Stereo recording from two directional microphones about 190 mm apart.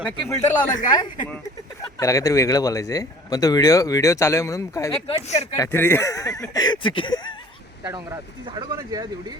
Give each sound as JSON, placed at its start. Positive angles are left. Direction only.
{"t": 0.0, "sound": "speech", "side_deg": 5}
{"t": 2.0, "sound": "speech", "side_deg": 15}
{"t": 5.0, "sound": "speech", "side_deg": 35}
{"t": 5.5, "sound": "speech", "side_deg": 15}
{"t": 6.5, "sound": "a sound", "side_deg": 20}
{"t": 7.9, "sound": "speech", "side_deg": -20}